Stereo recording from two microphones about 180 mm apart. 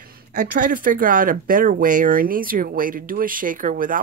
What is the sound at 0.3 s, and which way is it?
Speech, 50° right (ahead or behind).